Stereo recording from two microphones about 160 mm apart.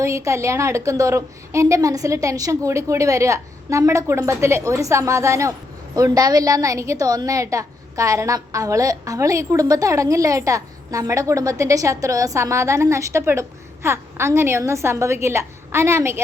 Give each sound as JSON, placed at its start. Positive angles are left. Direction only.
{"t": 0.0, "sound": "a woman's voice", "side_deg": -20}